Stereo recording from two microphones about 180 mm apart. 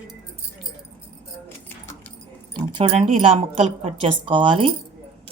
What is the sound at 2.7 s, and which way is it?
Speech, 35° right (ahead or behind).